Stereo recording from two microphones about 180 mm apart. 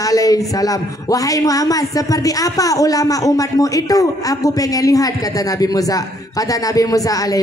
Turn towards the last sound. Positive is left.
turn(degrees=20)  # may be behind; listen again after turning